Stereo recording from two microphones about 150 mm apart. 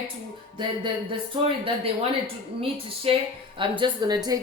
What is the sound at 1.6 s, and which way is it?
A woman's voice, 40° right (ahead or behind).